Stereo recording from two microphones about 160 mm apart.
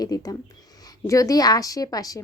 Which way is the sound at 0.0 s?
25° left (ahead or behind).